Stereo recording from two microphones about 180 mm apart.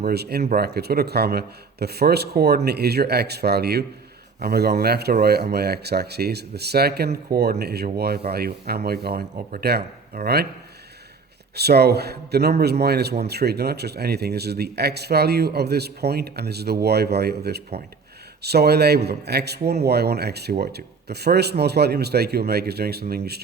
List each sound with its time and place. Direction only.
0.0 s a man's voice: 60° right (ahead or behind)
11.5 s a man's voice: 65° right (ahead or behind)